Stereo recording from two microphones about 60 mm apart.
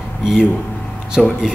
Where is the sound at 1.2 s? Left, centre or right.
Centre.